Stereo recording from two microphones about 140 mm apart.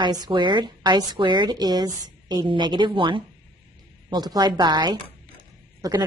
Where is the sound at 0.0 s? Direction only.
30° right (ahead or behind).